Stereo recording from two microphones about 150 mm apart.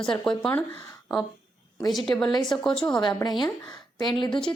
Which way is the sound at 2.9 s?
30° left (ahead or behind).